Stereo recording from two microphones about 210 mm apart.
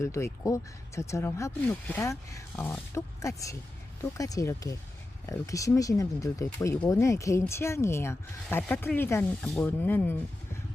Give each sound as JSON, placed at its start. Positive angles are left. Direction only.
{"t": 0.0, "sound": "speech", "side_deg": 15}